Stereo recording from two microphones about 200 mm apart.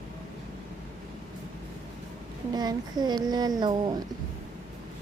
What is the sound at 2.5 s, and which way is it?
Speech, 20° right (ahead or behind).